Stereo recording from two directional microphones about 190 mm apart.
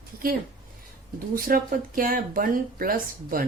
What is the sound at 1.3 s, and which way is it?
Speech, 50° right (ahead or behind).